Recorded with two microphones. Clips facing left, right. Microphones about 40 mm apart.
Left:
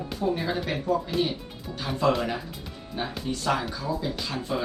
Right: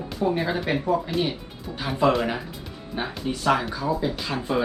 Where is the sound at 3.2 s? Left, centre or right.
Centre.